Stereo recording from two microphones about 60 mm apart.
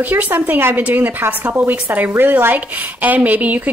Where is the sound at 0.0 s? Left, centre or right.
Right.